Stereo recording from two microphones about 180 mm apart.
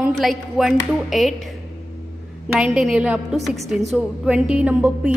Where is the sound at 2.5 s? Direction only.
Centre (ahead or behind).